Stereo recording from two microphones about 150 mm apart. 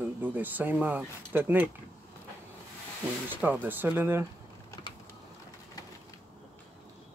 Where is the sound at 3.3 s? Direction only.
10° right (ahead or behind).